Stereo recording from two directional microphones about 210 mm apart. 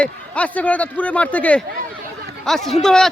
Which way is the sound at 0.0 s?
5° left (ahead or behind).